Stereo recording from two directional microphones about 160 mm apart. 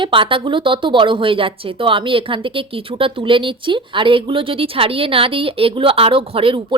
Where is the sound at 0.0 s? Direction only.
30° right (ahead or behind).